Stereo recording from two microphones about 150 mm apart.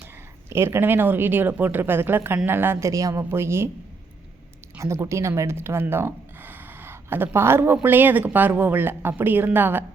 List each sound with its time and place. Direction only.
0.5 s speech: 15° right (ahead or behind)
4.8 s speech: 20° right (ahead or behind)